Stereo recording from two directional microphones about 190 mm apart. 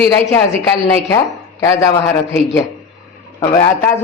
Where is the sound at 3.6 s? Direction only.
10° left (ahead or behind).